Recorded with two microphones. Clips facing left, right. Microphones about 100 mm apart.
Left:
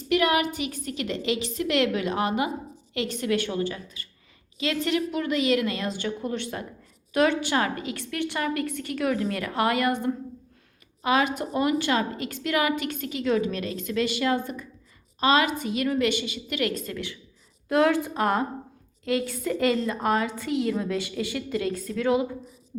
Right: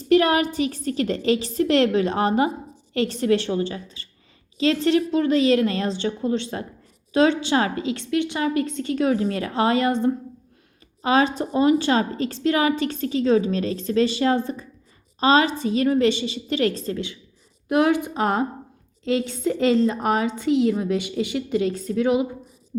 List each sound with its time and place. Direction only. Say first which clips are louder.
0.1 s a woman's voice: right 5 dB; 35° right (ahead or behind); by 22.3 s 20° right (ahead or behind)